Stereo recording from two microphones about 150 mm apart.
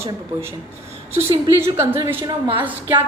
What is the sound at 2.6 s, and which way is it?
Speech, 10° right (ahead or behind).